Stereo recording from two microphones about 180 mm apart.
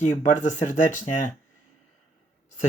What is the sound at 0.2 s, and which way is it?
Speech, 40° left (ahead or behind).